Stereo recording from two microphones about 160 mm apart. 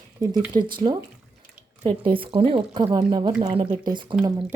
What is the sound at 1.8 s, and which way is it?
Speech, 35° right (ahead or behind).